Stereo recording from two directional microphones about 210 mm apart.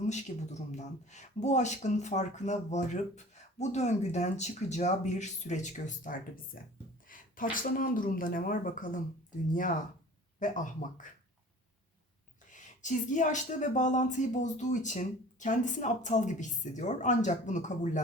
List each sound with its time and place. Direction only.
0.1 s speech: 35° left (ahead or behind)
10.4 s speech: 40° left (ahead or behind)
12.5 s speech: 35° left (ahead or behind)